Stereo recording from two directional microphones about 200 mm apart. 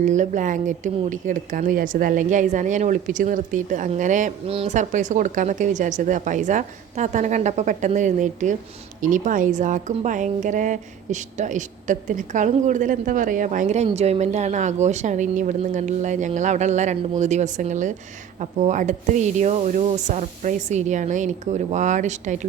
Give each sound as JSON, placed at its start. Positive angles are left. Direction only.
{"t": 0.0, "sound": "a woman's voice", "side_deg": -35}